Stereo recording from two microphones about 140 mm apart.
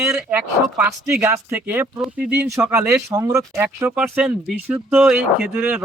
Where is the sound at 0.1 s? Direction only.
10° right (ahead or behind).